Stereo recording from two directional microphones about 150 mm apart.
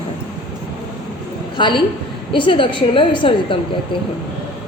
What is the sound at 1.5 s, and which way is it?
A woman's voice, 30° left (ahead or behind).